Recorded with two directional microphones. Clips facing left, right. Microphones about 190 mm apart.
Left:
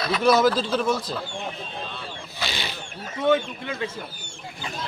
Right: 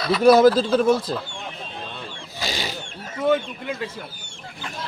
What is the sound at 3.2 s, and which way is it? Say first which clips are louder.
Speech: even; centre (ahead or behind).